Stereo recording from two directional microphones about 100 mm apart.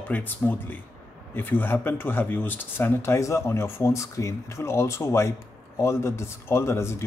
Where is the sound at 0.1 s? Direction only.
20° left (ahead or behind).